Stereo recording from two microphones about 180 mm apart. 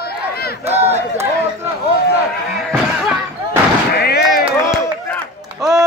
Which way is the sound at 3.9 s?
60° left (ahead or behind).